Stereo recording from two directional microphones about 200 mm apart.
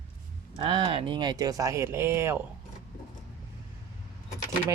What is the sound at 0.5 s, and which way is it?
Speech, 25° right (ahead or behind).